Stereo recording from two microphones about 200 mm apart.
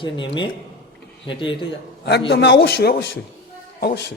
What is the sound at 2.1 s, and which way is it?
A man's voice, 55° left (ahead or behind).